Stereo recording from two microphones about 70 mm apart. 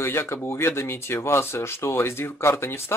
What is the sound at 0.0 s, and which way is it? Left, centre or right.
Speech, left.